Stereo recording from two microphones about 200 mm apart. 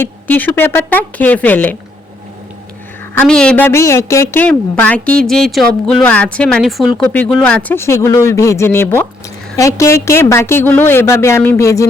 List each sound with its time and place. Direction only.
0.0 s a woman's voice: 10° left (ahead or behind)
3.2 s a woman's voice: 5° left (ahead or behind)